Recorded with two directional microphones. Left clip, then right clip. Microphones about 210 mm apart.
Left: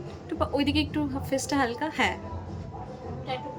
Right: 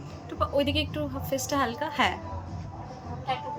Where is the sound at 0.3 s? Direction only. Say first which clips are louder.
Right 1 dB; 10° left (ahead or behind).